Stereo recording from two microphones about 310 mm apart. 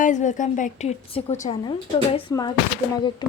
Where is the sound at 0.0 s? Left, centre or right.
Left.